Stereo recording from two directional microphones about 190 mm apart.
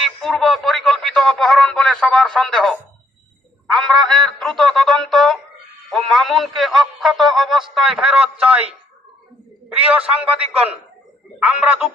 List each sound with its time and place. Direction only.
0.0 s speech: centre (ahead or behind)
3.7 s a sound: centre (ahead or behind)
5.9 s a man's voice: centre (ahead or behind)
9.6 s a man's voice: 5° right (ahead or behind)